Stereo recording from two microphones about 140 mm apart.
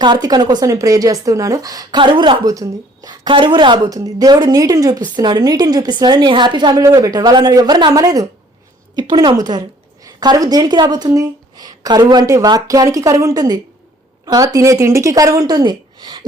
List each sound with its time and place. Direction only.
0.0 s a woman's voice: 30° right (ahead or behind)